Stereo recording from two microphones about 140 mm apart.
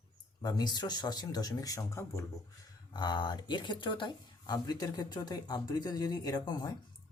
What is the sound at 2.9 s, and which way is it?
Speech, 30° left (ahead or behind).